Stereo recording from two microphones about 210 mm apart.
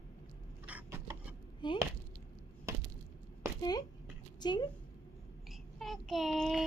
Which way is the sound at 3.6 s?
20° left (ahead or behind).